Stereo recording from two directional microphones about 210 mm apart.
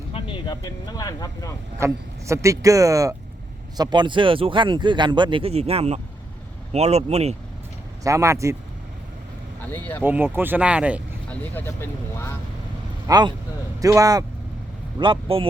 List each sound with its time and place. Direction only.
0.1 s speech: 25° left (ahead or behind)
1.8 s speech: 15° right (ahead or behind); by 7.3 s 30° right (ahead or behind)
8.0 s speech: 15° right (ahead or behind)
9.7 s speech: 10° left (ahead or behind)
10.0 s speech: 10° right (ahead or behind)
11.3 s speech: 10° left (ahead or behind)
13.1 s speech: 20° right (ahead or behind)